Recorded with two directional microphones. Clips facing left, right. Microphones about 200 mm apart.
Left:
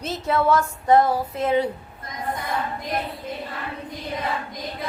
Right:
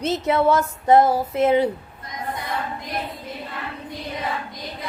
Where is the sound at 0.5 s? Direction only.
25° right (ahead or behind).